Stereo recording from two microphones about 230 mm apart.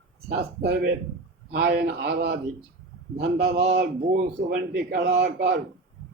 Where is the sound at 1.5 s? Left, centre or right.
Right.